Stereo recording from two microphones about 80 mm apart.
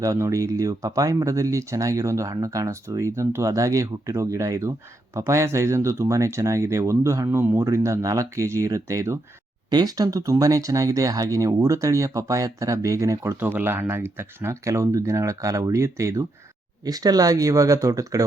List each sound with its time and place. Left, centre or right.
0.0 s speech: right
7.3 s speech: right
9.6 s speech: right
13.3 s speech: right
16.8 s speech: right